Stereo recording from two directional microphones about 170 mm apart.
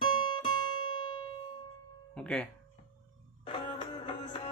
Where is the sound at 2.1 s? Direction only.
5° left (ahead or behind).